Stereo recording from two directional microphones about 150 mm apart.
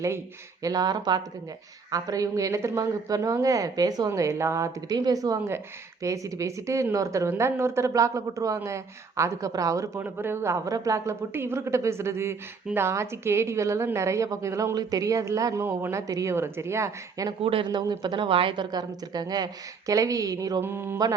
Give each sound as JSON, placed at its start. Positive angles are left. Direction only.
{"t": 0.6, "sound": "a woman's voice", "side_deg": -25}
{"t": 17.4, "sound": "a woman's voice", "side_deg": -35}